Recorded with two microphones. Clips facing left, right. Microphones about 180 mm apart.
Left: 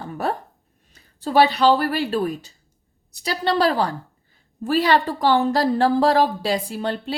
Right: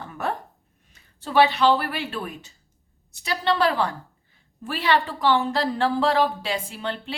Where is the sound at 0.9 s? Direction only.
40° left (ahead or behind).